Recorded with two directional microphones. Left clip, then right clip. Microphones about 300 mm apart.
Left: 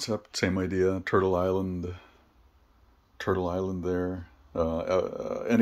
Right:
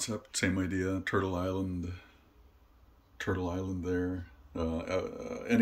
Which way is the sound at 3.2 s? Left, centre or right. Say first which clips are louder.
Left 6 dB; centre.